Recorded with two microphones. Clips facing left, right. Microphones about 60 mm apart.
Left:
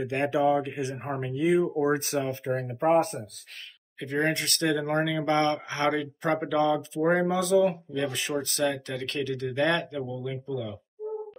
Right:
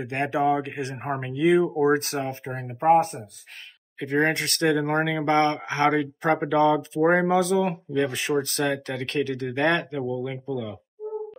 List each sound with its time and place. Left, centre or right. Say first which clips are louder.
0.0 s speech: right 1 dB; right
0.6 s speech: even; right
2.4 s speech: left 1 dB; right
2.9 s speech: right 5 dB; centre
4.0 s speech: right 4 dB; right
8.0 s speech: right 5 dB; right